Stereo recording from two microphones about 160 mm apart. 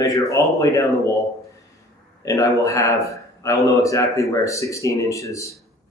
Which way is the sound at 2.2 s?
20° left (ahead or behind).